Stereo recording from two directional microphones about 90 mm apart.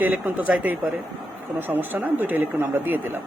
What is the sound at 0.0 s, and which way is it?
Speech, 15° right (ahead or behind).